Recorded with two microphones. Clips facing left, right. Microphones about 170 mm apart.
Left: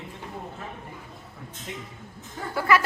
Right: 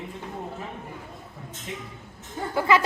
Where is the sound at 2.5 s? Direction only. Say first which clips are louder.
Right 1 dB; 20° right (ahead or behind).